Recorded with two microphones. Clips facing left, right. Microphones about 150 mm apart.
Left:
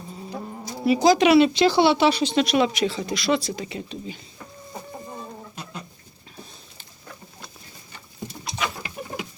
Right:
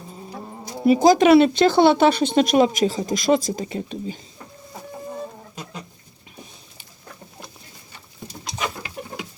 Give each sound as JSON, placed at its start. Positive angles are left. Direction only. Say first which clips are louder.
{"t": 0.6, "sound": "speech", "louder": "right 4 dB", "side_deg": -50}
{"t": 8.5, "sound": "bird", "louder": "right 1 dB", "side_deg": -40}